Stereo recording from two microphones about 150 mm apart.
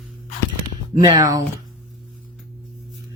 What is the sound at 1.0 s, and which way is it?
Speech, 25° right (ahead or behind).